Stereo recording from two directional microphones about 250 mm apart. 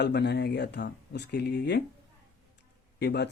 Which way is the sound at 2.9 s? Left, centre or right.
Left.